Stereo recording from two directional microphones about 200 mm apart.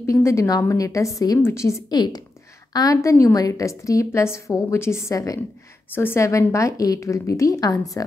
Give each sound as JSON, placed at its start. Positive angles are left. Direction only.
{"t": 0.0, "sound": "a woman's voice", "side_deg": 15}